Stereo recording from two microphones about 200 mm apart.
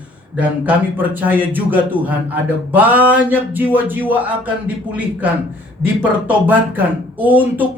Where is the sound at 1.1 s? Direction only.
10° right (ahead or behind).